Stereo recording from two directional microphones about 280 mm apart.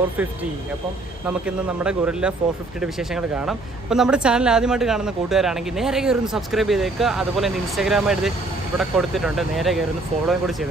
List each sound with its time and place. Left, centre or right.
1.2 s a woman's voice: centre